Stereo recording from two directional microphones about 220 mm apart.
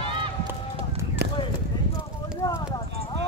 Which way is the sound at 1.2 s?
45° right (ahead or behind).